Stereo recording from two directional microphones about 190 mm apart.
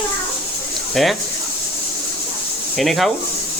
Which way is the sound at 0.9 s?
Centre (ahead or behind).